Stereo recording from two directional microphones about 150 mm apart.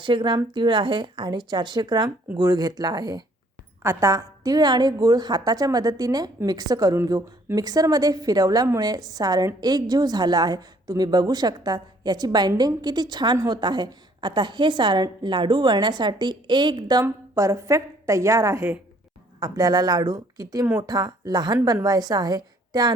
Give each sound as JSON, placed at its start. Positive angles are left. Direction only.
{"t": 0.0, "sound": "a woman's voice", "side_deg": -30}